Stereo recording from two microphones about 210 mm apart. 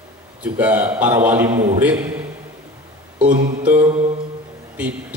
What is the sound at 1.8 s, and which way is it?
A man's voice, 10° right (ahead or behind).